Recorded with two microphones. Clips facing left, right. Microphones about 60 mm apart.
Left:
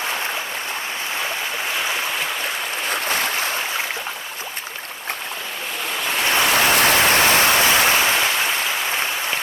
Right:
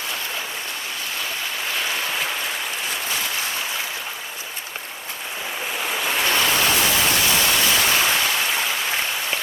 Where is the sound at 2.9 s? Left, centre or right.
Left.